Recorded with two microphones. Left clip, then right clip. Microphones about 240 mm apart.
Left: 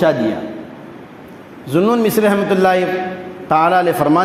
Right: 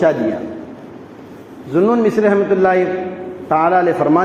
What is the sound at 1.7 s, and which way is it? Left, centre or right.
A man's voice, left.